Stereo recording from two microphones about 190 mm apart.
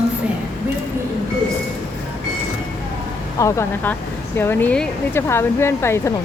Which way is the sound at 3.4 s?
15° left (ahead or behind).